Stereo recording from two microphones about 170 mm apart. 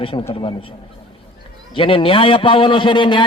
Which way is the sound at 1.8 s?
30° left (ahead or behind).